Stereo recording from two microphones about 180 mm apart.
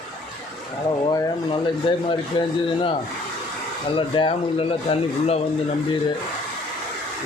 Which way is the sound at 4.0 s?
30° left (ahead or behind).